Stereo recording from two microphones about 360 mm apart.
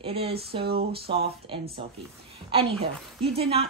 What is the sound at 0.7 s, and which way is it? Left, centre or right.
Speech, right.